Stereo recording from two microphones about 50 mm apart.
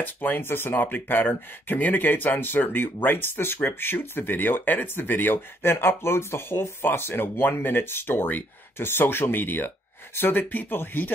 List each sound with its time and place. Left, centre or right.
0.0 s speech: left